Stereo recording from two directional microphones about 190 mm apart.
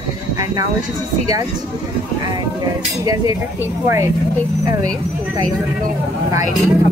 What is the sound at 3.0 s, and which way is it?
Speech, 15° right (ahead or behind).